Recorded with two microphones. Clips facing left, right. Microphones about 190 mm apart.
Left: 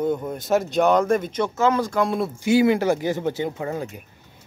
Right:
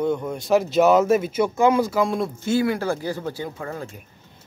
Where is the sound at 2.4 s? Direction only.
20° left (ahead or behind).